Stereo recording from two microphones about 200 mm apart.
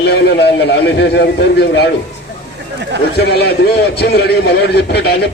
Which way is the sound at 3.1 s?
55° left (ahead or behind).